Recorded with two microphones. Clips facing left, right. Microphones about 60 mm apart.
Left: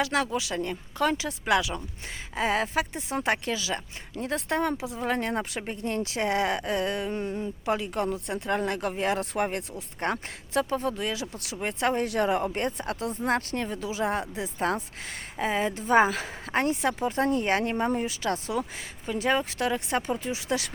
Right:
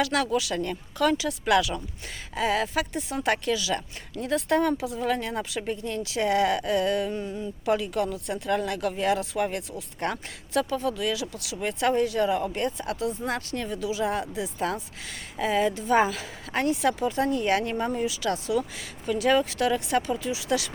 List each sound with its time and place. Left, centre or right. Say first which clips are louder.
0.0 s speech: right 2 dB; left
12.0 s speech: right 1 dB; left
18.0 s speech: right 2 dB; left
19.0 s speech: right 4 dB; left